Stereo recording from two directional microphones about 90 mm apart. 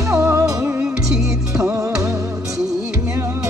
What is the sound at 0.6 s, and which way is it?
Music, 10° right (ahead or behind).